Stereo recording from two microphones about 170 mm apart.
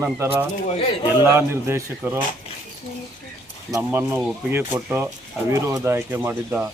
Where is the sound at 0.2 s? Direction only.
15° right (ahead or behind).